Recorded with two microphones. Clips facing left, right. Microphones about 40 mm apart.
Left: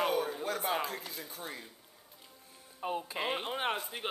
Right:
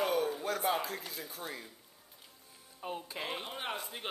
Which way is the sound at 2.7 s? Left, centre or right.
Centre.